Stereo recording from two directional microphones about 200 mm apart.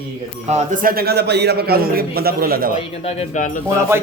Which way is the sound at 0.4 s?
35° right (ahead or behind).